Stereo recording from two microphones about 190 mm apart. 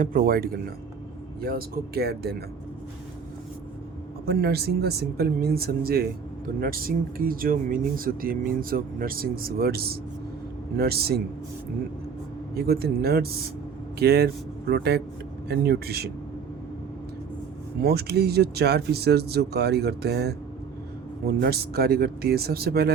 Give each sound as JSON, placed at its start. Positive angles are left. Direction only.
{"t": 0.0, "sound": "speech", "side_deg": -45}
{"t": 4.3, "sound": "speech", "side_deg": -55}
{"t": 12.5, "sound": "speech", "side_deg": -55}
{"t": 17.8, "sound": "speech", "side_deg": -55}